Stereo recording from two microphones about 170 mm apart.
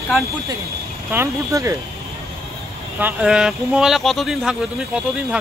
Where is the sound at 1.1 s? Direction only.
15° right (ahead or behind).